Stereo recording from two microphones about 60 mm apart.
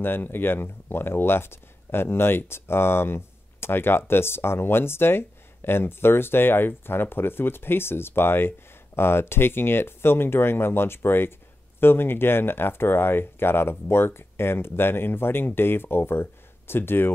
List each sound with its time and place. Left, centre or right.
0.0 s speech: left